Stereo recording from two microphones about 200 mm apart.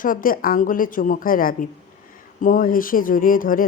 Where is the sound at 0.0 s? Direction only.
45° left (ahead or behind).